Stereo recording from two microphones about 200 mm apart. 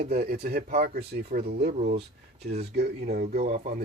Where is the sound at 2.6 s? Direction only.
55° right (ahead or behind).